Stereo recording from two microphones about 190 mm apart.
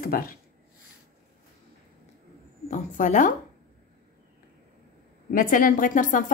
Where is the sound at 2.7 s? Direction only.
40° left (ahead or behind).